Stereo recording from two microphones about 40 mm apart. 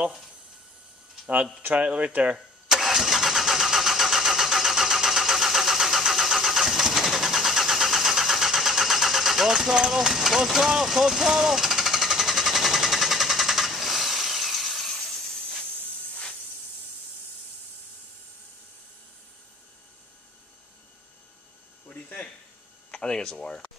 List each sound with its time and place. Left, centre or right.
1.7 s speech: right
2.7 s vehicle: centre
21.8 s a sound: left
22.8 s speech: left